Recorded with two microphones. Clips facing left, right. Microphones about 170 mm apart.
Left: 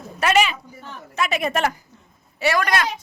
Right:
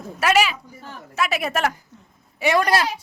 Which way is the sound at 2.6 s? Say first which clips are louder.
Right 4 dB; 30° right (ahead or behind).